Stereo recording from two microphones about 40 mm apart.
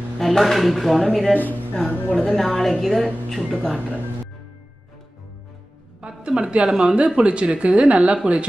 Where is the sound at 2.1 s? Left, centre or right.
Centre.